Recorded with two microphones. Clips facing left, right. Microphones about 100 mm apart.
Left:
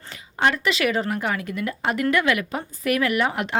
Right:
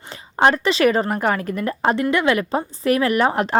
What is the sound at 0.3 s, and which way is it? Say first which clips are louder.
Speech: right 5 dB; 35° right (ahead or behind).